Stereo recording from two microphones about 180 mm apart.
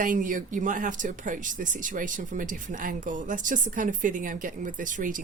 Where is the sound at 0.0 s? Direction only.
45° right (ahead or behind).